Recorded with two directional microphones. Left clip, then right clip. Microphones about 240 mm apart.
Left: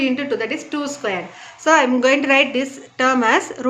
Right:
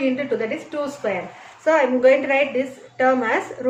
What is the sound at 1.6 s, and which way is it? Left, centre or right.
A woman's voice, left.